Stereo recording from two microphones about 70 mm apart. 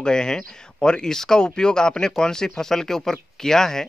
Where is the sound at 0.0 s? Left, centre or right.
Centre.